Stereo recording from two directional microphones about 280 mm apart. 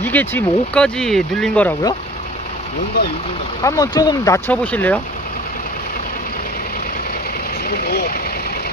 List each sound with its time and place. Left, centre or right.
0.0 s speech: centre
3.6 s speech: centre
7.7 s speech: left